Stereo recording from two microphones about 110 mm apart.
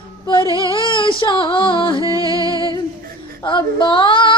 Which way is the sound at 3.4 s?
45° left (ahead or behind).